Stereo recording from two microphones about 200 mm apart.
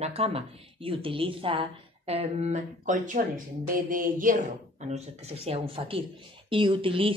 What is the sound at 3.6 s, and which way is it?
Mantra, 45° right (ahead or behind).